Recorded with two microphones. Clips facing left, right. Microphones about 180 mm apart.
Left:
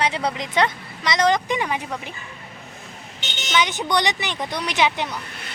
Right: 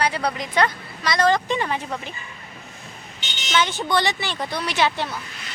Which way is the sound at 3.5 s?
15° left (ahead or behind).